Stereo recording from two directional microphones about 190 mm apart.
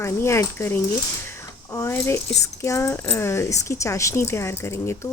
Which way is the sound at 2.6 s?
15° left (ahead or behind).